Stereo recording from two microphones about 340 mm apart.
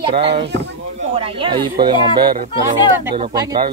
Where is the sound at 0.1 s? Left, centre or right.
Centre.